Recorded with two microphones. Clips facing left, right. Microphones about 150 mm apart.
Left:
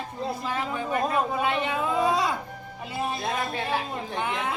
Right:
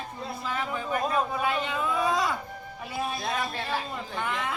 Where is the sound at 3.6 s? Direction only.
15° left (ahead or behind).